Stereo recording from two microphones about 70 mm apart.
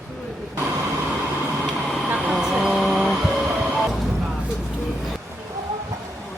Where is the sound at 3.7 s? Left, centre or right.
Centre.